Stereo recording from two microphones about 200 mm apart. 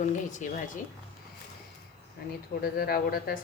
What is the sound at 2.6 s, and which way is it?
Speech, 45° left (ahead or behind).